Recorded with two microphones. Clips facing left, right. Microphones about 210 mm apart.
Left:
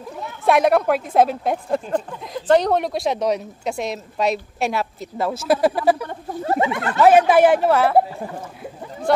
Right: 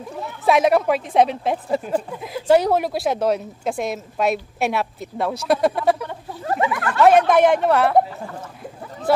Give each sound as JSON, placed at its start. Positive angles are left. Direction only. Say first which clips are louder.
{"t": 0.2, "sound": "a woman's voice", "louder": "even", "side_deg": 0}
{"t": 6.4, "sound": "a sound", "louder": "left 1 dB", "side_deg": 25}
{"t": 7.0, "sound": "a woman's voice", "louder": "left 1 dB", "side_deg": 5}